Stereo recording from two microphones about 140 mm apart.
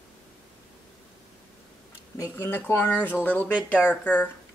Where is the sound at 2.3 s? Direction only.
15° left (ahead or behind).